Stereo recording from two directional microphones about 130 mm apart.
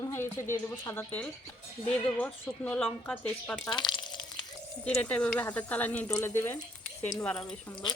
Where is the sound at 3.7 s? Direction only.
35° left (ahead or behind).